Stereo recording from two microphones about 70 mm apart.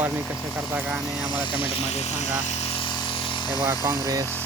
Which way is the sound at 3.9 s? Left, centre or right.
Right.